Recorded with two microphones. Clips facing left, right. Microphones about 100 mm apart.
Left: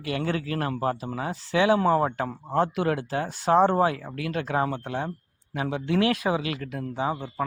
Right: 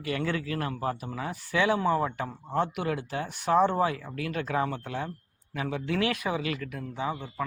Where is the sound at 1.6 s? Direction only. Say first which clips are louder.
Left 4 dB; 45° left (ahead or behind).